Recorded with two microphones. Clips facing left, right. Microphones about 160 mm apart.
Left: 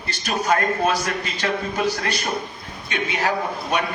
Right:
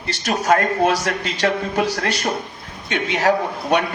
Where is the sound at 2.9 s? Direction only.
80° right.